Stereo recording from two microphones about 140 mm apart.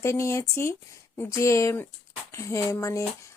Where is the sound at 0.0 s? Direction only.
20° left (ahead or behind).